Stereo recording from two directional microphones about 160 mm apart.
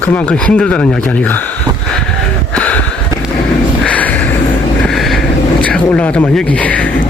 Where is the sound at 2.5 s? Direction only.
10° left (ahead or behind).